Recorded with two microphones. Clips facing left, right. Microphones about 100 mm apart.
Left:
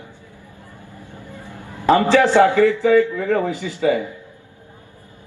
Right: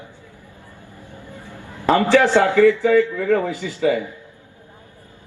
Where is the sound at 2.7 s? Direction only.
20° left (ahead or behind).